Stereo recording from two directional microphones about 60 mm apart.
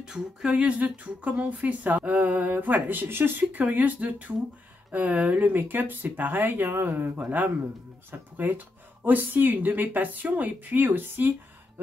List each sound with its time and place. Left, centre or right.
0.0 s speech: centre; by 3.4 s right
3.7 s speech: right
5.5 s speech: right
7.2 s speech: right